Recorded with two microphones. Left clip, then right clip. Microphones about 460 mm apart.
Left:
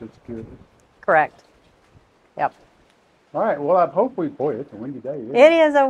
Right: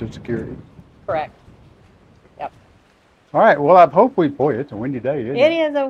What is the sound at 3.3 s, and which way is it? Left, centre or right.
Speech, right.